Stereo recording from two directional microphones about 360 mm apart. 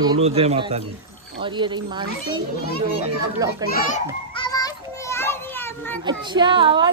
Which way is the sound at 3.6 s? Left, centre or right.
Centre.